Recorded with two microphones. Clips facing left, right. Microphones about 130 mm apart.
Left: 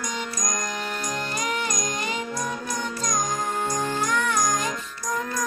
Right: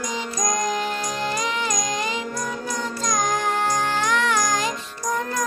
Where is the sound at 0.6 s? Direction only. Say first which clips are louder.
Right 6 dB; 90° right.